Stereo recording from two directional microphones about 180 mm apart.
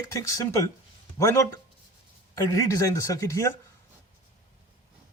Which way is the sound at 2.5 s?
15° left (ahead or behind).